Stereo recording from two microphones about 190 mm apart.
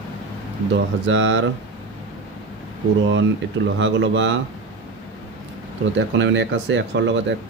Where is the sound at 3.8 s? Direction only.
70° right (ahead or behind).